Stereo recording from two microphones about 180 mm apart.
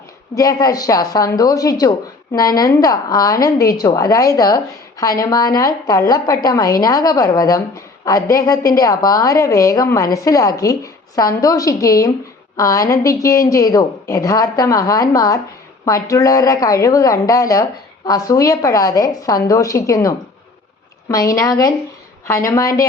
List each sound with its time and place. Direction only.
0.3 s a woman's voice: 20° left (ahead or behind)